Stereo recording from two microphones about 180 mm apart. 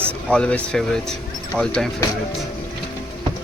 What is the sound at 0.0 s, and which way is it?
Speech, 5° left (ahead or behind).